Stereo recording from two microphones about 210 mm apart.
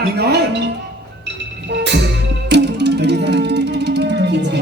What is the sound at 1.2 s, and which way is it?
Music, 55° right (ahead or behind).